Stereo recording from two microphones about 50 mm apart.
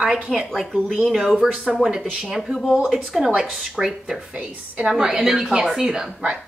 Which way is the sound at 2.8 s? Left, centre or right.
Centre.